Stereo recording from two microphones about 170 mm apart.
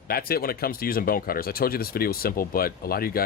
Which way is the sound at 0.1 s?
65° left (ahead or behind).